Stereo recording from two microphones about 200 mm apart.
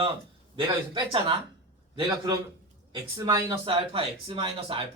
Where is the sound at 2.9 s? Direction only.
20° right (ahead or behind).